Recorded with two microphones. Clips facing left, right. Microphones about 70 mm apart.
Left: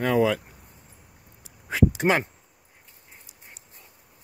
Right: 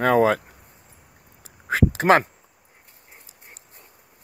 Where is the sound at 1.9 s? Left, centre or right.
Right.